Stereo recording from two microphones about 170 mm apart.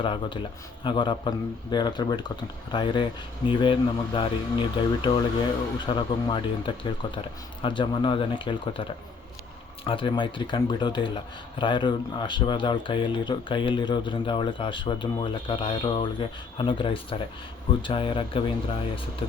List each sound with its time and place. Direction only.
0.0 s speech: 30° left (ahead or behind)